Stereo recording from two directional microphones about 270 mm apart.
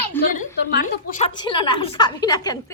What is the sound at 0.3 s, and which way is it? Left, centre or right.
Speech, left.